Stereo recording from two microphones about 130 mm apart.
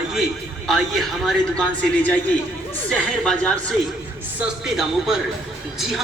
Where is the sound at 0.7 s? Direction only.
Centre (ahead or behind).